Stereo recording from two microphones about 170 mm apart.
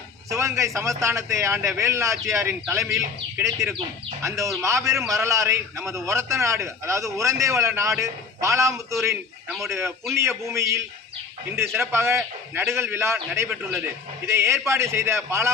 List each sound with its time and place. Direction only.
0.3 s a man's voice: 15° right (ahead or behind)
2.8 s a man's voice: 5° right (ahead or behind)
3.4 s a man's voice: 15° right (ahead or behind)